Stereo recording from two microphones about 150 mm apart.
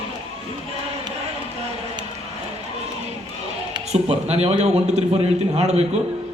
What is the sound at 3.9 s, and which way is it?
A man's voice, 45° right (ahead or behind).